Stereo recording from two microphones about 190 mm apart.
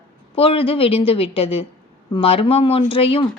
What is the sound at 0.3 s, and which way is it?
A woman's voice, 30° left (ahead or behind).